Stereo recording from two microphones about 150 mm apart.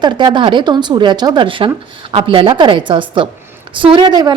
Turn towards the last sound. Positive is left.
turn(degrees=-30)  # may be behind; listen again after turning